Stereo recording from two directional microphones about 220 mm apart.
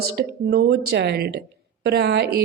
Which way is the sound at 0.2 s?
45° right (ahead or behind).